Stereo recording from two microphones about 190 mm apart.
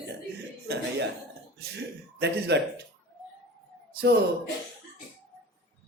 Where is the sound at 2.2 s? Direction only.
65° right (ahead or behind).